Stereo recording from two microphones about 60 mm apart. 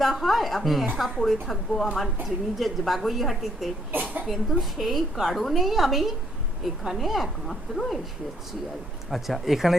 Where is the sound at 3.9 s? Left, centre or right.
Right.